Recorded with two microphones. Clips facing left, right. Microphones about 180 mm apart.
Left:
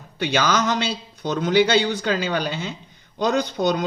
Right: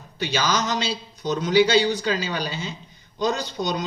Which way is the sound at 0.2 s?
55° left (ahead or behind).